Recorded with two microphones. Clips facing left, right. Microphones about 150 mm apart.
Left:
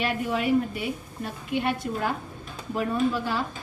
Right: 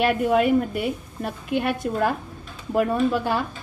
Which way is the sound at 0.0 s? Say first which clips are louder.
Right 7 dB; 55° right (ahead or behind).